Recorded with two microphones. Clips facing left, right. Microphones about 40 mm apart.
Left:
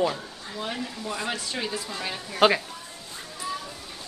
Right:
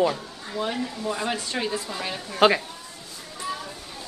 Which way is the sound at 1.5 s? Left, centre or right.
Centre.